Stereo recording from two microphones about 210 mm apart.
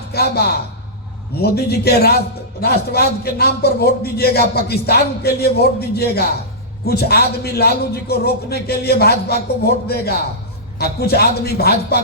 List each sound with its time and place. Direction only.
0.1 s a man's voice: 50° left (ahead or behind)